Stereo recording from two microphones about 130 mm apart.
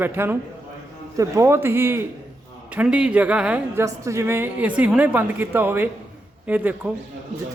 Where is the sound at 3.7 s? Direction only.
25° right (ahead or behind).